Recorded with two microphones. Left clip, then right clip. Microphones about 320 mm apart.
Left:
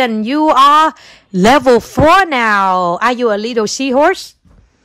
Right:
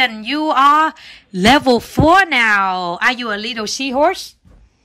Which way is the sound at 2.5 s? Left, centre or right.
Left.